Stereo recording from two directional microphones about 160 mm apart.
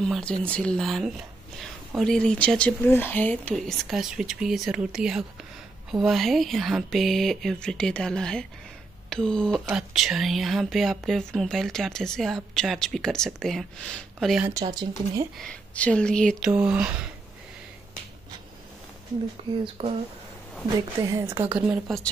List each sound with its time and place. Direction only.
0.0 s speech: 5° left (ahead or behind)
14.5 s speech: 25° right (ahead or behind)
15.4 s speech: 5° left (ahead or behind); by 17.1 s 10° right (ahead or behind)
21.0 s a woman's voice: 15° right (ahead or behind)
21.5 s speech: 5° right (ahead or behind)